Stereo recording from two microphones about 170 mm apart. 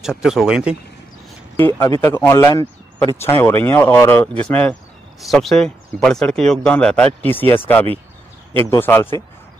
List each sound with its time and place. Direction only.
0.0 s speech: 5° right (ahead or behind)
1.8 s speech: 15° left (ahead or behind)